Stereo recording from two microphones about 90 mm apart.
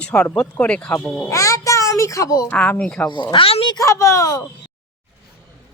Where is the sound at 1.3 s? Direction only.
35° left (ahead or behind).